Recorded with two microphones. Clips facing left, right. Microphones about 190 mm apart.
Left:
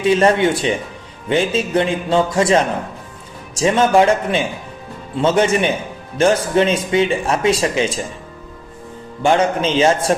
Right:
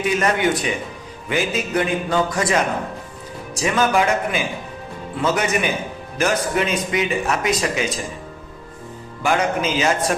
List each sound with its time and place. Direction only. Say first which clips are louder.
0.0 s speech: left 6 dB; 30° left (ahead or behind)
9.2 s speech: left 4 dB; 30° left (ahead or behind)